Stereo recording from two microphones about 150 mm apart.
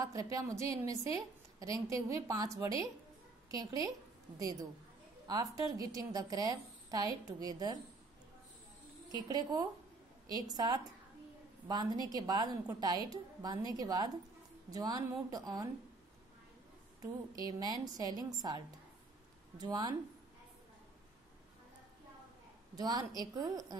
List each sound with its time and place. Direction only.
0.0 s a woman's voice: 25° right (ahead or behind)
9.1 s a woman's voice: 25° right (ahead or behind)
17.0 s a woman's voice: 25° right (ahead or behind)
19.6 s a woman's voice: 30° right (ahead or behind)
22.8 s a woman's voice: 25° right (ahead or behind)